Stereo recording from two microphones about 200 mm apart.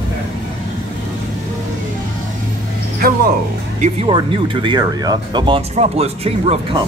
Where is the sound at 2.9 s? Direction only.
50° right (ahead or behind).